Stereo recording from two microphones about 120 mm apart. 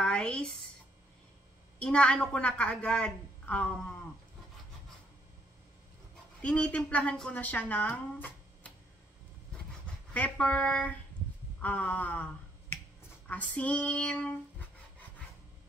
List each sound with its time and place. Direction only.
0.0 s a sound: 10° left (ahead or behind)
1.8 s a woman's voice: 10° left (ahead or behind)
6.4 s a woman's voice: 10° left (ahead or behind)
10.1 s a woman's voice: 10° left (ahead or behind)
11.6 s finger snapping: 10° left (ahead or behind)
13.3 s a woman's voice: 10° left (ahead or behind)